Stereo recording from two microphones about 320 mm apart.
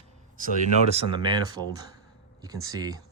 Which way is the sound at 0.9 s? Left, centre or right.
Centre.